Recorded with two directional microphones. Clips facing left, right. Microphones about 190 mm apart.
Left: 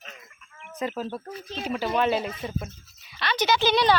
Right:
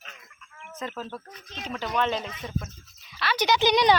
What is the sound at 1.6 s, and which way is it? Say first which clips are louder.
Speech: left 3 dB; 10° left (ahead or behind).